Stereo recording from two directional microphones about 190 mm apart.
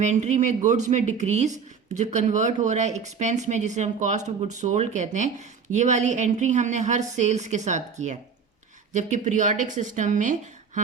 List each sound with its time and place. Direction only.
0.0 s speech: 35° right (ahead or behind)